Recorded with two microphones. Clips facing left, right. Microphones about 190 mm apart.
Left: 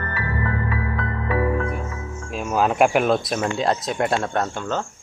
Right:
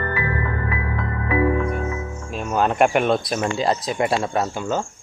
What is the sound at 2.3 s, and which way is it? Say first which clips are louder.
Speech: even; centre (ahead or behind).